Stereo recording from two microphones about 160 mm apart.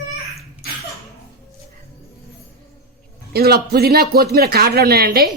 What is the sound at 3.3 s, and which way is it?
Speech, 75° right (ahead or behind).